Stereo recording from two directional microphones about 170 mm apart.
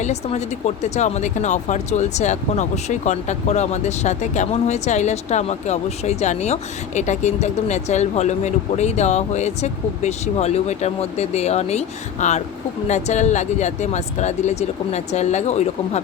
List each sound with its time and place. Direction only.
0.0 s speech: 40° left (ahead or behind)